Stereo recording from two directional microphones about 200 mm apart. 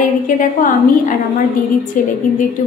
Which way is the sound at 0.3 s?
40° left (ahead or behind).